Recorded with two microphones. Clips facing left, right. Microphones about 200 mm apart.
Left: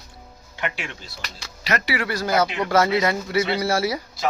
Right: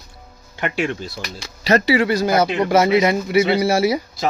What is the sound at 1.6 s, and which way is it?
Speech, 30° right (ahead or behind).